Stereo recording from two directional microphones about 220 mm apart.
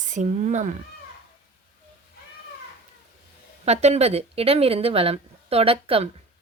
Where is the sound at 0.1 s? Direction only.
35° right (ahead or behind).